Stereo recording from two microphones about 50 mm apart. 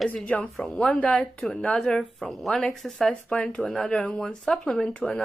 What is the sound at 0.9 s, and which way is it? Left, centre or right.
Speech, left.